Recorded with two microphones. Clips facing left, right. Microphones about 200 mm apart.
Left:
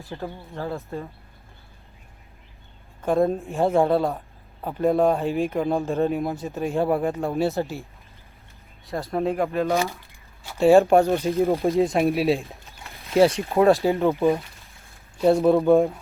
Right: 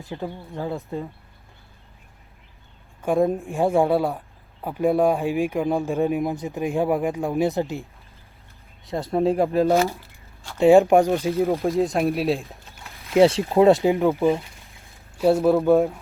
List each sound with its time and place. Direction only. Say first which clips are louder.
0.0 s speech: right 2 dB; 15° right (ahead or behind)
3.0 s speech: even; 10° right (ahead or behind)
9.2 s speech: right 5 dB; 30° right (ahead or behind)
10.6 s speech: right 1 dB; 15° right (ahead or behind)
11.3 s speech: left 1 dB; centre (ahead or behind)
13.1 s speech: right 2 dB; 25° right (ahead or behind)
15.2 s speech: even; 5° right (ahead or behind)